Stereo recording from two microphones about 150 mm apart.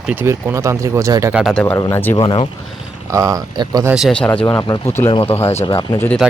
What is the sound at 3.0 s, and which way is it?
Speech, 20° right (ahead or behind).